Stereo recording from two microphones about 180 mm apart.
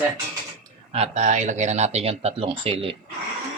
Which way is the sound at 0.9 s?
35° right (ahead or behind).